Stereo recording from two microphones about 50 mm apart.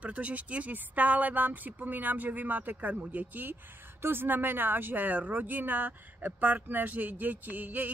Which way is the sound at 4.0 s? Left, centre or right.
Right.